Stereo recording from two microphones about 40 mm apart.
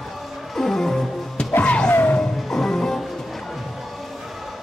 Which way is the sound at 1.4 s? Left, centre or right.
Left.